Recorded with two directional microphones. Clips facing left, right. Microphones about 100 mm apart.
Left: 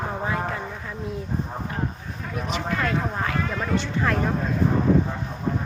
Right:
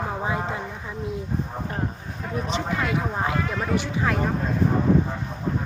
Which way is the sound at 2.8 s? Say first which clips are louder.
Even; 15° right (ahead or behind).